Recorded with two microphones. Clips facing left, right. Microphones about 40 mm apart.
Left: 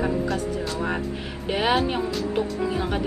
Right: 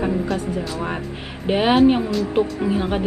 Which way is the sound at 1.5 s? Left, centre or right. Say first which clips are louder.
Right 7 dB; centre.